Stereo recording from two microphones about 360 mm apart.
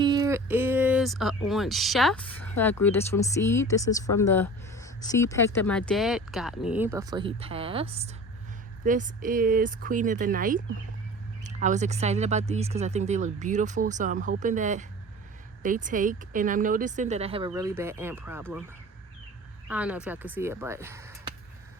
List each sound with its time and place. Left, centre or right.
0.0 s a sound: centre
2.8 s speech: centre
19.6 s speech: centre